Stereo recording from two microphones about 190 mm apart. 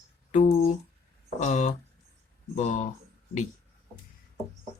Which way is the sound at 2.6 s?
40° left (ahead or behind).